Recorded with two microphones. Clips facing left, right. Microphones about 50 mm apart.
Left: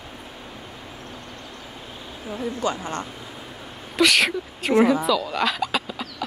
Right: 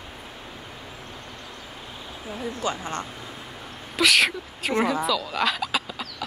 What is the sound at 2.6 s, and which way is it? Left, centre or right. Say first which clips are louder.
Speech: left 1 dB; left.